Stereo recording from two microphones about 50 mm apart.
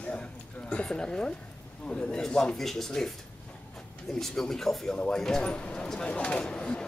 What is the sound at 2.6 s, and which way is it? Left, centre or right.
Speech, centre.